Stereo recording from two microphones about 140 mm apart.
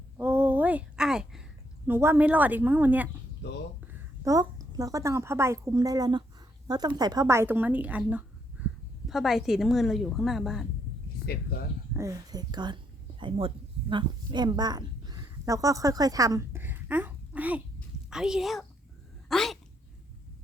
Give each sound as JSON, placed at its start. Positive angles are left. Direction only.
{"t": 0.2, "sound": "a sound", "side_deg": -15}
{"t": 1.9, "sound": "a woman's voice", "side_deg": -15}
{"t": 3.9, "sound": "a woman's voice", "side_deg": -25}
{"t": 11.3, "sound": "speech", "side_deg": 90}
{"t": 11.9, "sound": "a woman's voice", "side_deg": -25}
{"t": 19.3, "sound": "a sound", "side_deg": 0}